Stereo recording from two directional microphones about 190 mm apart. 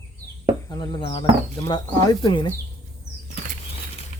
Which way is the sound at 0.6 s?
25° left (ahead or behind).